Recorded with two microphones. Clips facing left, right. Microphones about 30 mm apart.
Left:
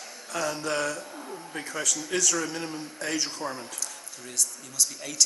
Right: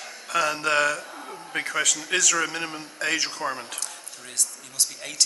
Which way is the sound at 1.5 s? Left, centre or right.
Right.